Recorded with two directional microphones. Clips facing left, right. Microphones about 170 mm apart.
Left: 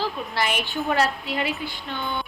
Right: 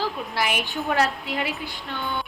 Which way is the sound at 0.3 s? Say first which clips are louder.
Left 1 dB; 10° right (ahead or behind).